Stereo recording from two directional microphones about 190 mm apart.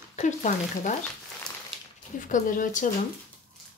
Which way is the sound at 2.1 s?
45° left (ahead or behind).